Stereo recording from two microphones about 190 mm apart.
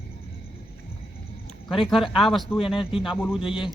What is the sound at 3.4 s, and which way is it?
Speech, 25° left (ahead or behind).